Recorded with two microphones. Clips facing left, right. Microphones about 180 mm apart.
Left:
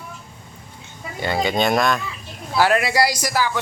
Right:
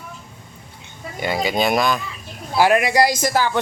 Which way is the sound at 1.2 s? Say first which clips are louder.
Even; 10° right (ahead or behind).